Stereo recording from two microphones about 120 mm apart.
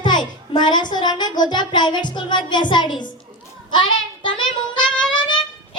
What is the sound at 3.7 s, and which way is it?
Child singing, 40° left (ahead or behind).